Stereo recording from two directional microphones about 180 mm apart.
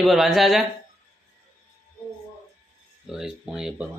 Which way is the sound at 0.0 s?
Centre (ahead or behind).